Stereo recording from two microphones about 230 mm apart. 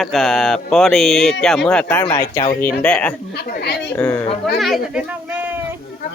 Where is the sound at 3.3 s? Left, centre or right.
Left.